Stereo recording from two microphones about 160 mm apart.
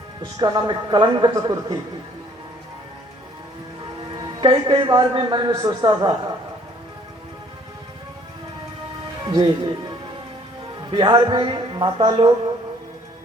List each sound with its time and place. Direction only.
0.2 s a man's voice: 25° right (ahead or behind)
4.2 s a man's voice: 25° right (ahead or behind)
9.2 s a man's voice: 25° right (ahead or behind)
10.9 s a man's voice: 30° right (ahead or behind)